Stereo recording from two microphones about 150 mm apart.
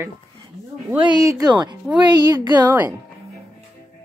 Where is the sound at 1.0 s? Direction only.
20° right (ahead or behind).